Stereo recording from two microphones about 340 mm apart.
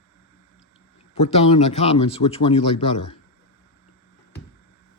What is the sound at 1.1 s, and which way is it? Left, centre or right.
Speech, centre.